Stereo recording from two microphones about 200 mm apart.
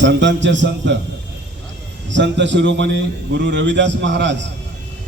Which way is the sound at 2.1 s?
65° right (ahead or behind).